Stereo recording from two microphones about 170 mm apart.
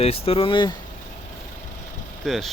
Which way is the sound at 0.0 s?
35° left (ahead or behind).